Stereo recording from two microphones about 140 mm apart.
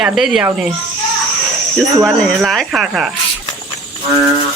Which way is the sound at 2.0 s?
Centre (ahead or behind).